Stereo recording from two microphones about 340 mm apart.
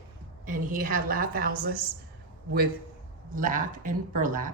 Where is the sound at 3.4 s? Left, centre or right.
Right.